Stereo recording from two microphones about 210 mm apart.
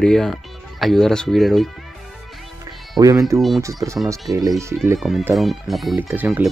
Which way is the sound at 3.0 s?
15° right (ahead or behind).